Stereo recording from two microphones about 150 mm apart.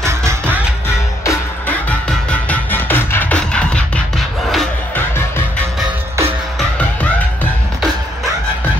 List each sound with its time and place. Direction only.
0.0 s music: 20° right (ahead or behind)
1.9 s music: 10° left (ahead or behind)